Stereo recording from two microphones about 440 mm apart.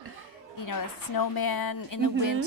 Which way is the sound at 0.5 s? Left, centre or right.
Left.